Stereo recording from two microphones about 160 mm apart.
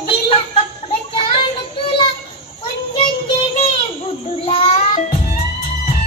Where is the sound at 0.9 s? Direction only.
35° left (ahead or behind).